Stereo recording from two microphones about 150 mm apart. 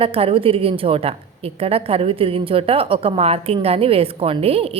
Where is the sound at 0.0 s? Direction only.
40° right (ahead or behind).